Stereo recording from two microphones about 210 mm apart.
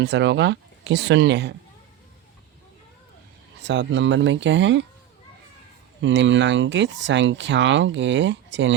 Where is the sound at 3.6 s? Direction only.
55° right (ahead or behind).